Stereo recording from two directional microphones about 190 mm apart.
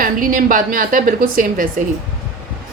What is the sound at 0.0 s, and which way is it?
Speech, 45° right (ahead or behind).